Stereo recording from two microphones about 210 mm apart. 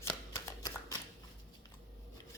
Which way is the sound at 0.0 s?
15° left (ahead or behind).